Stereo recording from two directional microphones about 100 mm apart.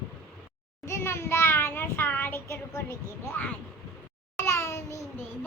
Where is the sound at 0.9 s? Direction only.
25° left (ahead or behind).